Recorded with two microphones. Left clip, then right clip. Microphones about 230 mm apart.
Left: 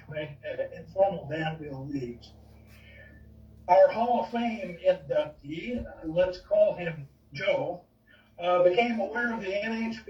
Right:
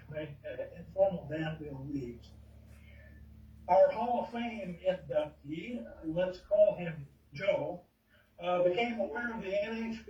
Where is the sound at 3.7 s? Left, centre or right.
Left.